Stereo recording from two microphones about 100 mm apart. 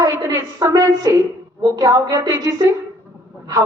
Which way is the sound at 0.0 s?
40° right (ahead or behind).